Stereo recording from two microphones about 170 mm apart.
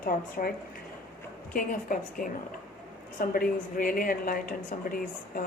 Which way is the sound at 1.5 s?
55° left (ahead or behind).